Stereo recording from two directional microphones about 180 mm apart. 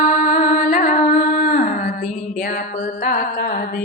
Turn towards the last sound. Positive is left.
turn(degrees=55)  # may be behind; listen again after turning